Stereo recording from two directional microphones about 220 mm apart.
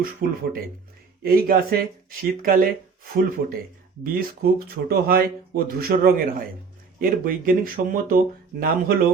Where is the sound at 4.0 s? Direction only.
40° right (ahead or behind).